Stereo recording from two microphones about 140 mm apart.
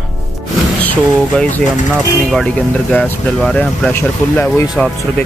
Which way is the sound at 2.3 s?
5° left (ahead or behind).